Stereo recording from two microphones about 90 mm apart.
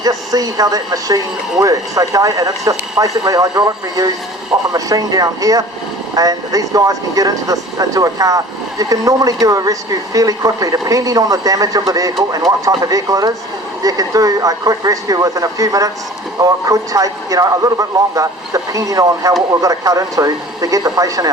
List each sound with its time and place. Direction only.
0.0 s speech: 45° right (ahead or behind)